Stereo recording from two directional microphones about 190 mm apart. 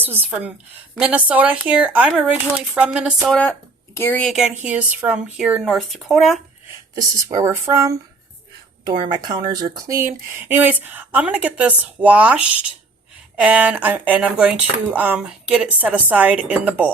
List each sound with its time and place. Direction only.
0.0 s speech: 10° right (ahead or behind)
3.2 s speech: 5° left (ahead or behind)
4.3 s speech: 5° right (ahead or behind)
6.9 s speech: 15° right (ahead or behind)
9.0 s speech: 20° right (ahead or behind)